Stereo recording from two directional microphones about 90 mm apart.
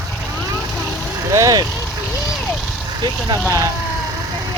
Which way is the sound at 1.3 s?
40° right (ahead or behind).